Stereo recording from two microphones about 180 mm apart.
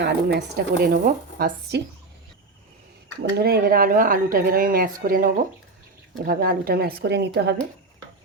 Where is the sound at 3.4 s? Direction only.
60° right (ahead or behind).